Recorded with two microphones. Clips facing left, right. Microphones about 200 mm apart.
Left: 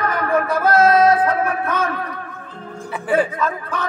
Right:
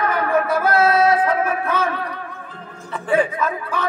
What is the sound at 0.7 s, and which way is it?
Speech, 45° left (ahead or behind).